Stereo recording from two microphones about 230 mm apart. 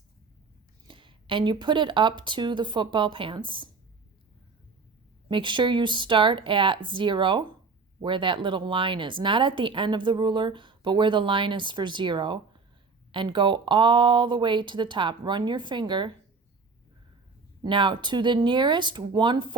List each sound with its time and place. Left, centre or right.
0.9 s speech: right
5.3 s speech: right
17.6 s speech: right